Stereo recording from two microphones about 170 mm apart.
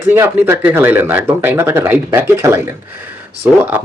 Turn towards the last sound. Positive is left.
turn(degrees=-10)  # may be behind; listen again after turning